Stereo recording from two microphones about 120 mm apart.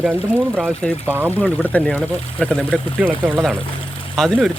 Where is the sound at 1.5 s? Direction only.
15° left (ahead or behind).